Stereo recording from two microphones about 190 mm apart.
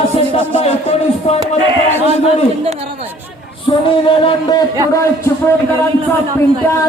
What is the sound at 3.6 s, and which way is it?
Music, 25° left (ahead or behind).